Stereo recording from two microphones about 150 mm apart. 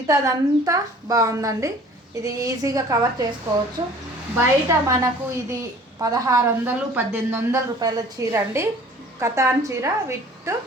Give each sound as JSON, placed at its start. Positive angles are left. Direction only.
{"t": 0.1, "sound": "a woman's voice", "side_deg": -20}
{"t": 4.4, "sound": "a woman's voice", "side_deg": -15}